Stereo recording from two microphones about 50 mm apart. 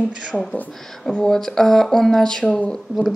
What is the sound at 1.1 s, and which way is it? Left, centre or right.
A woman's voice, centre.